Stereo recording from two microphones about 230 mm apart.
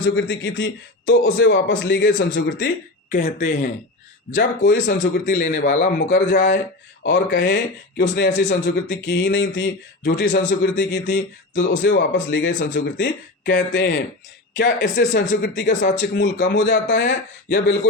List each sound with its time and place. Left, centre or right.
0.0 s a man's voice: left
3.1 s a man's voice: left
4.4 s a man's voice: left
4.9 s a man's voice: left
6.1 s a man's voice: left
15.7 s a man's voice: left
16.2 s a man's voice: left